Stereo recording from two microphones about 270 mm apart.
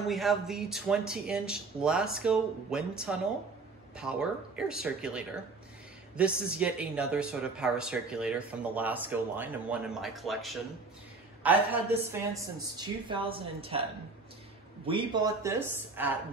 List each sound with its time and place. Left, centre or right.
0.1 s speech: centre; by 13.8 s right
14.9 s speech: centre